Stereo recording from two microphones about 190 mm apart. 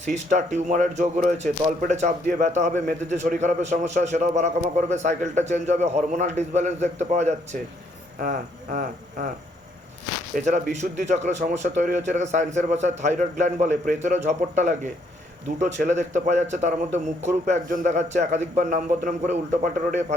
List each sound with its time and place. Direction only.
0.0 s speech: 40° right (ahead or behind)
10.3 s speech: 40° right (ahead or behind)